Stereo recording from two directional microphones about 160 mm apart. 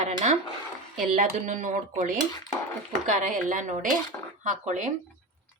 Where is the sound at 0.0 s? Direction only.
50° right (ahead or behind).